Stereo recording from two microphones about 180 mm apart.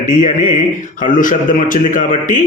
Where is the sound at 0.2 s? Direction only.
45° left (ahead or behind).